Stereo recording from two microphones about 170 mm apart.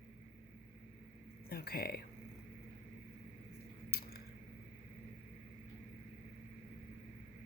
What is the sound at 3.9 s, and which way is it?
Squish, 65° left (ahead or behind).